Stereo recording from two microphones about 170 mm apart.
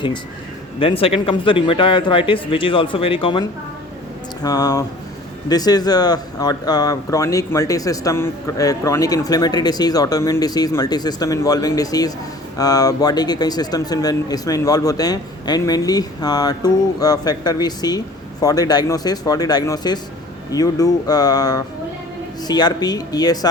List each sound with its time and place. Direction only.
0.8 s a man's voice: 35° left (ahead or behind)
4.4 s speech: 20° left (ahead or behind)